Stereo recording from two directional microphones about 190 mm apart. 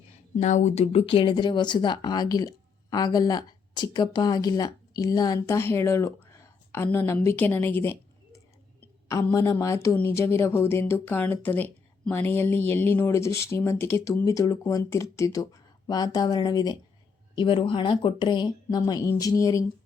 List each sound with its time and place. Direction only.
0.3 s speech: 40° left (ahead or behind); by 19.6 s 15° left (ahead or behind)